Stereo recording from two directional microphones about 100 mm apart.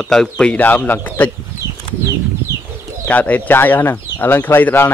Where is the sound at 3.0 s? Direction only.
15° left (ahead or behind).